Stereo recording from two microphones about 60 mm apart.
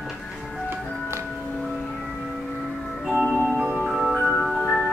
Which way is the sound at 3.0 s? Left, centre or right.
Centre.